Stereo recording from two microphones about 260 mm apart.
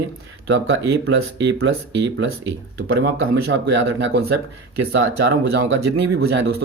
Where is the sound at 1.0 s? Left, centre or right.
Right.